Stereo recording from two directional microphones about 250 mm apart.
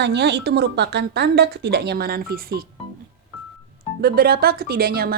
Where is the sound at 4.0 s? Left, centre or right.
Right.